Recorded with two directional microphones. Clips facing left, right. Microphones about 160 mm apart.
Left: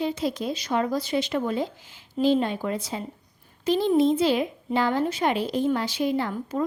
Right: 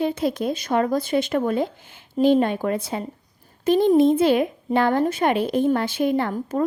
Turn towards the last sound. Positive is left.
turn(degrees=-55)  # may be behind; listen again after turning